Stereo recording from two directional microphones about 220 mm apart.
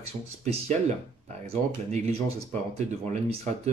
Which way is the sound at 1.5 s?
30° right (ahead or behind).